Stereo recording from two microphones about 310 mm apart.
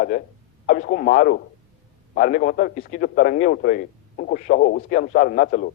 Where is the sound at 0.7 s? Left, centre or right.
Left.